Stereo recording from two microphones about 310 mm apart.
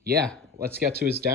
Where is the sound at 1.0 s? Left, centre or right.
Right.